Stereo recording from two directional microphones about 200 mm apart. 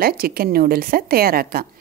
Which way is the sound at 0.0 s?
50° right (ahead or behind).